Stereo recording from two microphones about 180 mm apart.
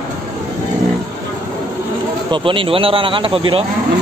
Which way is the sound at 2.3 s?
30° right (ahead or behind).